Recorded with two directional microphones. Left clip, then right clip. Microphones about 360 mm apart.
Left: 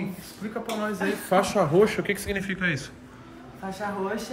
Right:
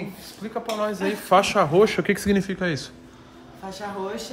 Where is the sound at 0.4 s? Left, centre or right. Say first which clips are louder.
Right 4 dB; right.